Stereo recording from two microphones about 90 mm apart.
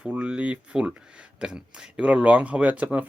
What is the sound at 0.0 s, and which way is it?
Speech, 10° right (ahead or behind).